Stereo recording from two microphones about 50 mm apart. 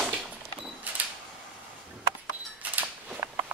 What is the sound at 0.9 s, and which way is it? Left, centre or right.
Cash register, right.